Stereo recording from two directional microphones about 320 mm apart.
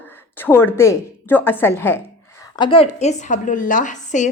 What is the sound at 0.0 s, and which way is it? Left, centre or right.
A woman's voice, centre.